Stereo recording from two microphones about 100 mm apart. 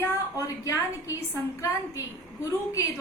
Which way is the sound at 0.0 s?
35° left (ahead or behind).